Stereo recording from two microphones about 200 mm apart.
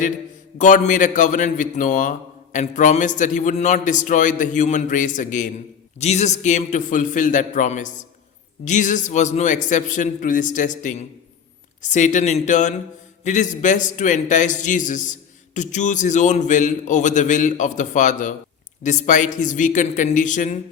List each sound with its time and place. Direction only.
0.6 s a man's voice: 40° left (ahead or behind)